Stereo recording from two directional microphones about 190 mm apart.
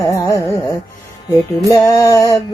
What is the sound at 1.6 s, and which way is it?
Music, 15° left (ahead or behind).